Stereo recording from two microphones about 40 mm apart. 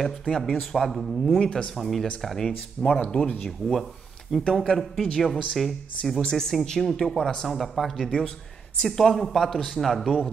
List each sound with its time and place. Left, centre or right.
0.2 s speech: centre
1.4 s speech: left
1.8 s speech: centre
3.1 s speech: centre
6.2 s speech: centre